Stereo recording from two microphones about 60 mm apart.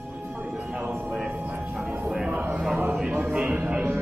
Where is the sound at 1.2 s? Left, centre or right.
Right.